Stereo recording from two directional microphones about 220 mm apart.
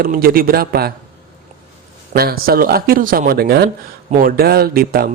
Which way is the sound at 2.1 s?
45° right (ahead or behind).